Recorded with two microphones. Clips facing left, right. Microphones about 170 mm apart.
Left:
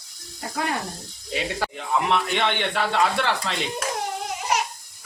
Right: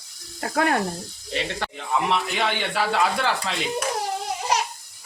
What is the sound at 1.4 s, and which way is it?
Speech, centre (ahead or behind).